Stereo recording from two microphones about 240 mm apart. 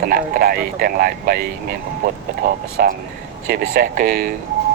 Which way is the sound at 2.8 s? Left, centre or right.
Right.